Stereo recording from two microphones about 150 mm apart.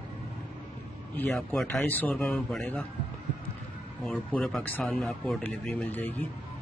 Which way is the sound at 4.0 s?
5° left (ahead or behind).